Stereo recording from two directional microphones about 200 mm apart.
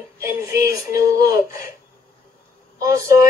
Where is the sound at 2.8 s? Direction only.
15° right (ahead or behind).